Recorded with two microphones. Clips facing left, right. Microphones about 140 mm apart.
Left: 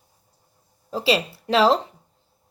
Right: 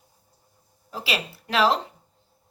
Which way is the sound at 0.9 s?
30° left (ahead or behind).